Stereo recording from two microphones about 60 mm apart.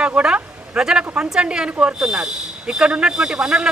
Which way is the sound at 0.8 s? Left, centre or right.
Centre.